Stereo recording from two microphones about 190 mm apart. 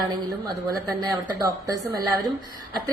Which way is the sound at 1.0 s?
20° right (ahead or behind).